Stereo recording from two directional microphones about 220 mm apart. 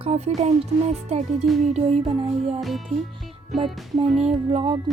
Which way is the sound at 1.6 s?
30° right (ahead or behind).